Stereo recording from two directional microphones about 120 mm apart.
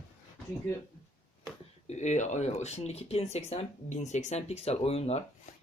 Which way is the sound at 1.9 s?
75° left (ahead or behind).